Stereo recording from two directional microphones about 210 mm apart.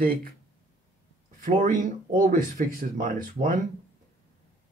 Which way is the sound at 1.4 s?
40° right (ahead or behind).